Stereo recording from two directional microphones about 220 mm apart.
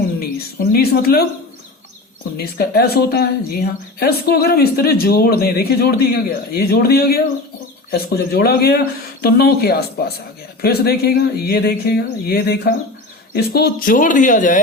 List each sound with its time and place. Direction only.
0.2 s speech: 45° left (ahead or behind)
2.4 s speech: 45° left (ahead or behind)